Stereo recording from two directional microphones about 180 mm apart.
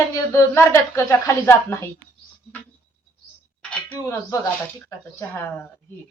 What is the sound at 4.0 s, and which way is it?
Speech, 15° left (ahead or behind).